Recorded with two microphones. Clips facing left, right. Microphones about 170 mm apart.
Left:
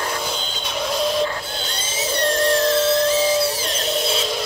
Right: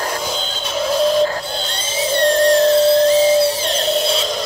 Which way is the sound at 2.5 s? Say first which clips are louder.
Right 6 dB; 30° right (ahead or behind).